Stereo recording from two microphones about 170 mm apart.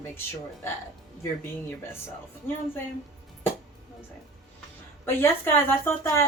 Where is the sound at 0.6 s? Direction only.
15° left (ahead or behind).